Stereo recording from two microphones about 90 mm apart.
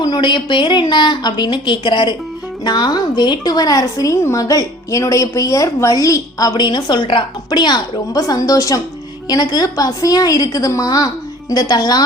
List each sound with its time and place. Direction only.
0.0 s a woman's voice: 60° left (ahead or behind)